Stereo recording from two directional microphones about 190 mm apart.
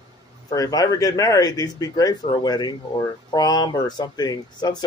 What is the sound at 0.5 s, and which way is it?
Speech, 20° left (ahead or behind).